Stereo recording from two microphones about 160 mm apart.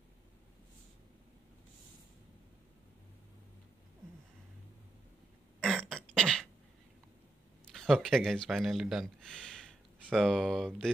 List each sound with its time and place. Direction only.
5.6 s throat clearing: centre (ahead or behind)
7.7 s speech: centre (ahead or behind)